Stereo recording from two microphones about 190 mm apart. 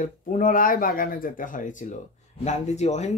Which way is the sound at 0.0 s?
45° left (ahead or behind).